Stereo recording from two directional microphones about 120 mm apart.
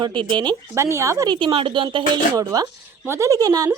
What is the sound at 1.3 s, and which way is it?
Speech, 45° right (ahead or behind).